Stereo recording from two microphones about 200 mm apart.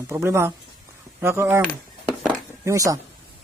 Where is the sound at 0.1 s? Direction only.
15° right (ahead or behind).